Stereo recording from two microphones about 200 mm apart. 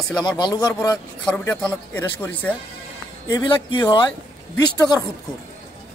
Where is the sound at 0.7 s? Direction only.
10° left (ahead or behind).